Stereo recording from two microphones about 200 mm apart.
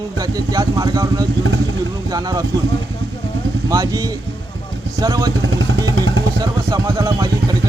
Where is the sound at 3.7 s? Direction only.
15° right (ahead or behind).